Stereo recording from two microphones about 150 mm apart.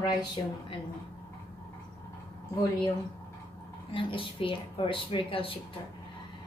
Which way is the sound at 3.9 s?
35° left (ahead or behind).